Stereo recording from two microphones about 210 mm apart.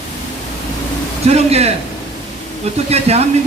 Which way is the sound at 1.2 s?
30° right (ahead or behind).